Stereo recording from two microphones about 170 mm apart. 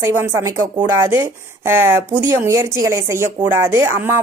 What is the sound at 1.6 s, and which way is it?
Speech, 15° right (ahead or behind).